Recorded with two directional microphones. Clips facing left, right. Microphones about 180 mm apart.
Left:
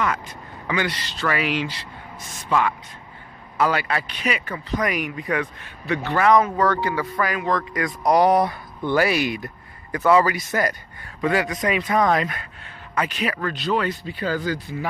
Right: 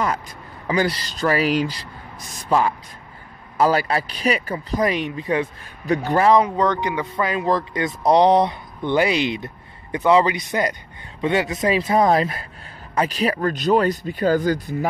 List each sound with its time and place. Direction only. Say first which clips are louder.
0.7 s speech: right 4 dB; 35° right (ahead or behind)
6.4 s speech: right 1 dB; 20° right (ahead or behind); by 14.9 s 45° right (ahead or behind)